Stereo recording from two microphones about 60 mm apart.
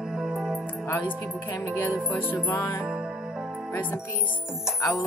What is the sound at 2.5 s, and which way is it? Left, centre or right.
Music, left.